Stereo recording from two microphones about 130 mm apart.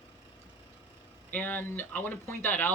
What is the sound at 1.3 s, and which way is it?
Speech, 15° left (ahead or behind).